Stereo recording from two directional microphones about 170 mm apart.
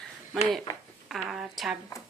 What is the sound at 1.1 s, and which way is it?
Speech, centre (ahead or behind).